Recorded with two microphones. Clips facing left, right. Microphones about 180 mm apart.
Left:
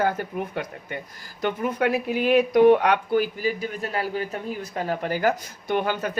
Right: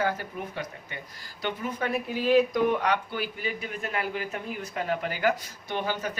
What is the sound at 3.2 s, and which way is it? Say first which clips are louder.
A man's voice: left 8 dB; 40° left (ahead or behind).